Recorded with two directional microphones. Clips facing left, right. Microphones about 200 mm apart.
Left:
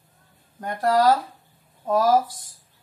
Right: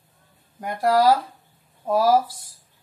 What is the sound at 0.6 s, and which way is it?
Speech, 10° right (ahead or behind).